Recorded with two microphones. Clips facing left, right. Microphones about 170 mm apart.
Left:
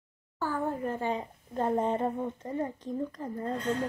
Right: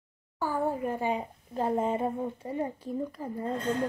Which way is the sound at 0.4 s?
10° right (ahead or behind).